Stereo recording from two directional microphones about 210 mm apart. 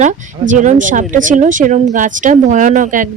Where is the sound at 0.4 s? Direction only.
35° right (ahead or behind).